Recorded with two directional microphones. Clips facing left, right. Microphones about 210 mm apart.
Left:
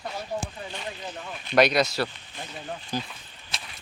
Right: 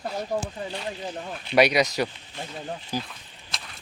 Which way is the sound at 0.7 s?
30° right (ahead or behind).